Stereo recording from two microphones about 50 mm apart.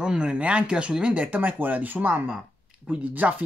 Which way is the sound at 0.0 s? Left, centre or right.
Centre.